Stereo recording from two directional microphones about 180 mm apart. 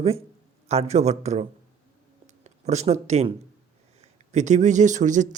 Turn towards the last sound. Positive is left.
turn(degrees=-45)  # may be behind; listen again after turning